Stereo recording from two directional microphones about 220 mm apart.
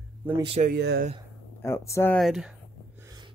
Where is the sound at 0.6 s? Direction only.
45° right (ahead or behind).